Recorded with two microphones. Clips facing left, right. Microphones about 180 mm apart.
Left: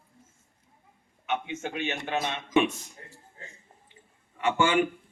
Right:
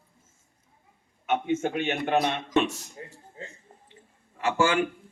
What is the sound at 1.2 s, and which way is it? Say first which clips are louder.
Speech: right 6 dB; 50° right (ahead or behind).